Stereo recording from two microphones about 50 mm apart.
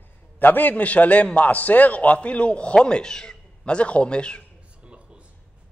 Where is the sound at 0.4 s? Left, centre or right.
Left; by 4.5 s centre.